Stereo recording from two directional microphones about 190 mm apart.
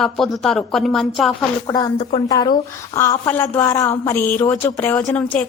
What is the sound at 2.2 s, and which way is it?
A woman's voice, 20° left (ahead or behind).